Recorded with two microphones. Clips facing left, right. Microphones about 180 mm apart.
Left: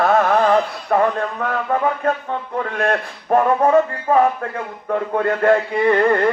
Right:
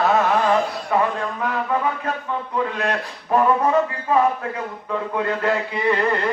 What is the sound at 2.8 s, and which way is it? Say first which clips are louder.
A man's voice: left 4 dB; 50° left (ahead or behind).